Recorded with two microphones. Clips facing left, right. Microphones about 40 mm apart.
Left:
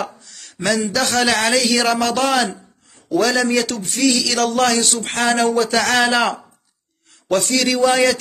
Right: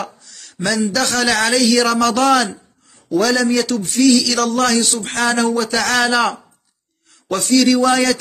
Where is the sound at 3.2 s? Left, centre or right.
Left.